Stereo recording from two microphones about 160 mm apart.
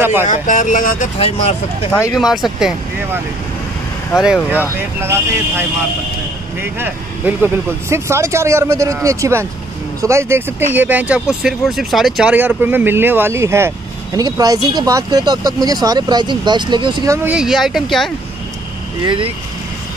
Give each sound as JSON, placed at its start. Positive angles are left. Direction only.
{"t": 0.0, "sound": "speech", "side_deg": -15}
{"t": 0.3, "sound": "speech", "side_deg": 50}
{"t": 1.1, "sound": "speech", "side_deg": 40}
{"t": 2.1, "sound": "speech", "side_deg": 0}
{"t": 4.1, "sound": "speech", "side_deg": -5}
{"t": 6.6, "sound": "speech", "side_deg": -15}
{"t": 17.3, "sound": "speech", "side_deg": -5}
{"t": 19.0, "sound": "speech", "side_deg": -35}